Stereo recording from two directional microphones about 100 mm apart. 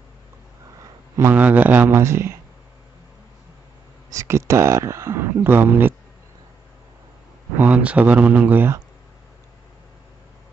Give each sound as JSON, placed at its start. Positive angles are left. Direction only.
{"t": 1.3, "sound": "speech", "side_deg": -15}
{"t": 4.1, "sound": "speech", "side_deg": -30}
{"t": 7.5, "sound": "speech", "side_deg": -15}